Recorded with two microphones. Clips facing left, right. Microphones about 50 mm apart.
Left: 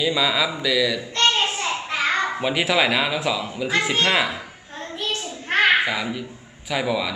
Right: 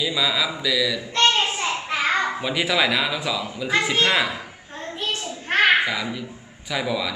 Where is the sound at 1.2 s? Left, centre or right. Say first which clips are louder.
Right 1 dB; centre.